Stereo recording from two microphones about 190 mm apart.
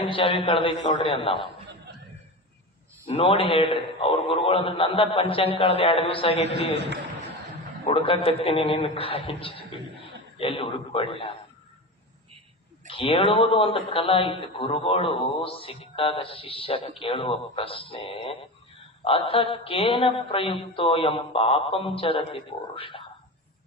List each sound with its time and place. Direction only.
0.0 s a man's voice: 30° left (ahead or behind)
3.1 s a man's voice: 30° left (ahead or behind)
7.9 s a man's voice: 30° left (ahead or behind)
12.9 s a man's voice: 30° left (ahead or behind)